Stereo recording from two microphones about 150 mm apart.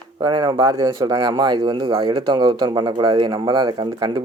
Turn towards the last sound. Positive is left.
turn(degrees=-30)  # may be behind; listen again after turning